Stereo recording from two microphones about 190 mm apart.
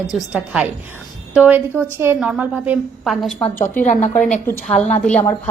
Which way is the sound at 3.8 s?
40° left (ahead or behind).